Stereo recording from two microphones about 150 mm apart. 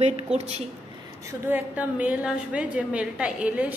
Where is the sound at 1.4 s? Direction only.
10° right (ahead or behind).